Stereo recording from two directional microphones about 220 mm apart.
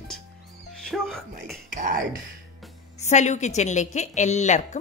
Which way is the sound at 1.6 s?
40° right (ahead or behind).